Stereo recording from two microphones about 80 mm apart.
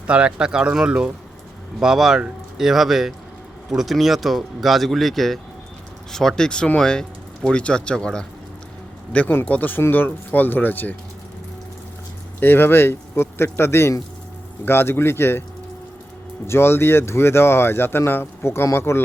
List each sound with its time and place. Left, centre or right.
0.1 s speech: centre
9.1 s speech: left
12.4 s speech: left
16.5 s speech: left